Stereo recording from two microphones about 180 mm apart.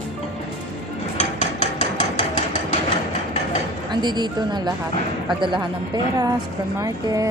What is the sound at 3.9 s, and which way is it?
Speech, 25° right (ahead or behind).